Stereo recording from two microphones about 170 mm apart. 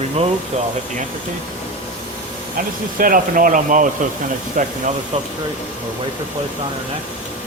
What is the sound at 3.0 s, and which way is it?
Speech, 55° right (ahead or behind).